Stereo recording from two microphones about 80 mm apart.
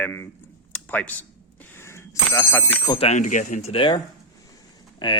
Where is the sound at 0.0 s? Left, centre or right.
Left.